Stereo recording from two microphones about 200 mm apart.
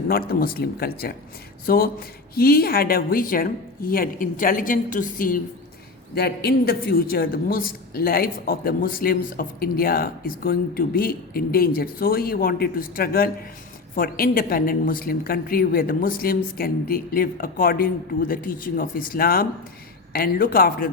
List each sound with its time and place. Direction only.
0.1 s a man's voice: 45° left (ahead or behind)
6.1 s a man's voice: 55° left (ahead or behind)